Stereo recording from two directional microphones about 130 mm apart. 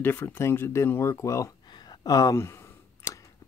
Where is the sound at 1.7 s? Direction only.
30° left (ahead or behind).